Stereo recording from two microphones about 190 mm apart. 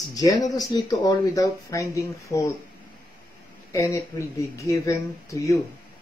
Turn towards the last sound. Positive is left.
turn(degrees=15)  # may be behind; listen again after turning